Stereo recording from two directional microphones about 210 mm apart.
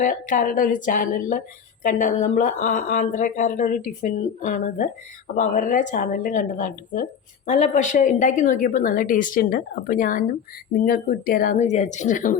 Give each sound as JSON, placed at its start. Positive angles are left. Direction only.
{"t": 0.0, "sound": "speech", "side_deg": 40}